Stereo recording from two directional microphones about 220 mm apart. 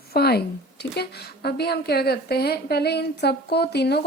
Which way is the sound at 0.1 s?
45° left (ahead or behind).